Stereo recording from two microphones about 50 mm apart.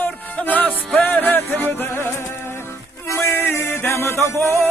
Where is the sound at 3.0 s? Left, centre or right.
Left.